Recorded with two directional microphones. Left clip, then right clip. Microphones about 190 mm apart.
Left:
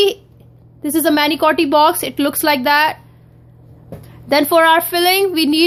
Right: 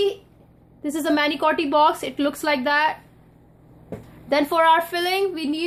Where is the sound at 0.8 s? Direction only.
35° left (ahead or behind).